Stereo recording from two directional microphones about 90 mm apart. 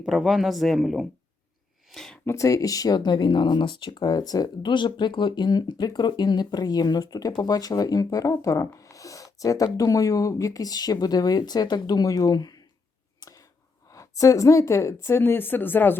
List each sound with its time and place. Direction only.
0.0 s speech: centre (ahead or behind)
2.2 s speech: 35° left (ahead or behind)
13.9 s speech: 40° left (ahead or behind); by 16.0 s 20° left (ahead or behind)